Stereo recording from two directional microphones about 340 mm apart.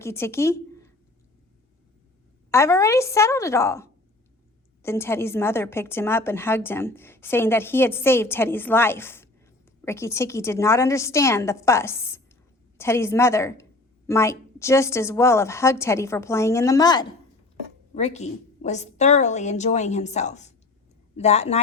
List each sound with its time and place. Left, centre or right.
0.0 s speech: centre
2.5 s a woman's voice: centre